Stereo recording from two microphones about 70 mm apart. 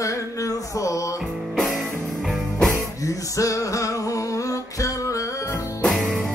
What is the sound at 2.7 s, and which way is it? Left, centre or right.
Music, left.